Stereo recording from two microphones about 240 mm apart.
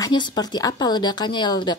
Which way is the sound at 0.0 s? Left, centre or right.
Centre.